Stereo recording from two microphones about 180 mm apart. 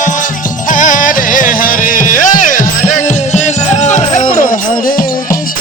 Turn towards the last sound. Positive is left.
turn(degrees=50)  # may be behind; listen again after turning